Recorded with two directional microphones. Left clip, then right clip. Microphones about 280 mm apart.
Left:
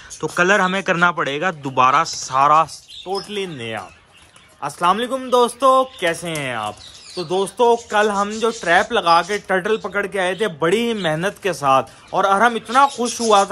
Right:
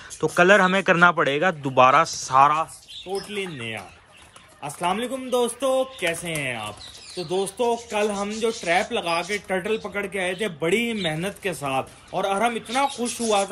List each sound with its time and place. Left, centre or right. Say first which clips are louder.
0.2 s a man's voice: even; centre
13.0 s speech: left 7 dB; left